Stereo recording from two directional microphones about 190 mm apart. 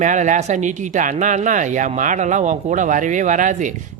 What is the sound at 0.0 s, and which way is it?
Speech, 40° right (ahead or behind).